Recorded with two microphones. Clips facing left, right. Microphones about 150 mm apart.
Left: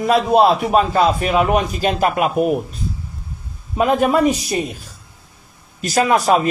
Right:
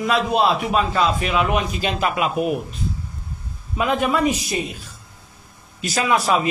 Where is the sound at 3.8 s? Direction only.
45° left (ahead or behind).